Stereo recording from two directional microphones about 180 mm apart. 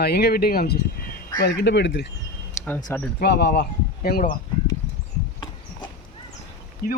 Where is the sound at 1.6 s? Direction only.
75° left (ahead or behind).